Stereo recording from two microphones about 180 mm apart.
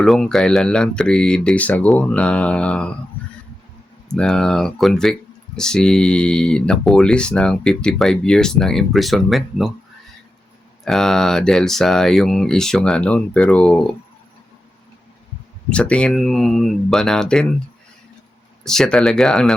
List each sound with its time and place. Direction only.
0.0 s speech: centre (ahead or behind)
4.1 s speech: 5° left (ahead or behind)
10.8 s speech: centre (ahead or behind)
15.7 s speech: 5° left (ahead or behind)
18.6 s speech: 5° left (ahead or behind)